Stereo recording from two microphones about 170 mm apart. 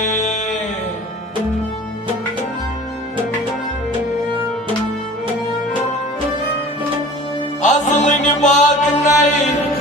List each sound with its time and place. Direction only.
0.0 s music: 45° left (ahead or behind)
7.6 s music: 45° left (ahead or behind)